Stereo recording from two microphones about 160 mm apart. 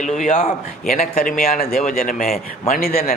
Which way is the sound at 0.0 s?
50° left (ahead or behind).